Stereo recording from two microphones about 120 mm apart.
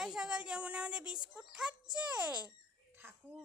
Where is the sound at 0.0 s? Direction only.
5° right (ahead or behind).